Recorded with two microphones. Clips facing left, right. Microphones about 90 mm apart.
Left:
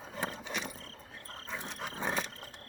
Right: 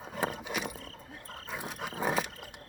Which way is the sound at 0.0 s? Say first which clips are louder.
Right 4 dB; 10° right (ahead or behind).